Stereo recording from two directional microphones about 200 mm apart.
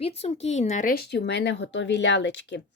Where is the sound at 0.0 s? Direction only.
30° left (ahead or behind).